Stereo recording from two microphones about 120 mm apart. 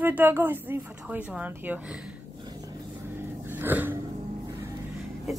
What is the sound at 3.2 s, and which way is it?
Wheeze, 20° right (ahead or behind).